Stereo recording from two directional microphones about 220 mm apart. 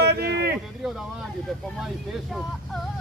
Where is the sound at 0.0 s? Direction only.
50° right (ahead or behind).